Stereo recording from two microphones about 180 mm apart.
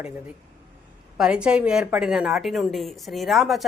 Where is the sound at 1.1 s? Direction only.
5° right (ahead or behind).